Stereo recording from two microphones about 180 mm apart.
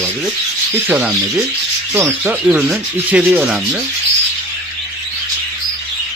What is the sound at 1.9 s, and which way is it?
Speech, 15° right (ahead or behind).